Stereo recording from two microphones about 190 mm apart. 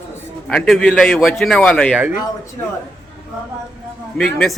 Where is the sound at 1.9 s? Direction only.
5° right (ahead or behind).